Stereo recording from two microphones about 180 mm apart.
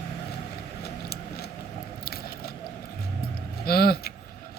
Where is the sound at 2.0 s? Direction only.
60° left (ahead or behind).